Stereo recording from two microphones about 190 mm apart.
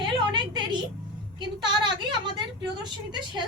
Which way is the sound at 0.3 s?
25° right (ahead or behind).